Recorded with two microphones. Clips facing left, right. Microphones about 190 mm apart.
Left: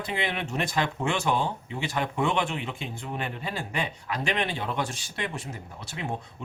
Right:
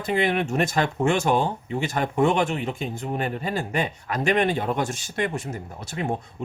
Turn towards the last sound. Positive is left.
turn(degrees=-45)  # may be behind; listen again after turning